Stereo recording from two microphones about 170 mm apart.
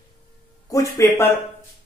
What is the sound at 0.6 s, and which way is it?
Speech, 20° left (ahead or behind).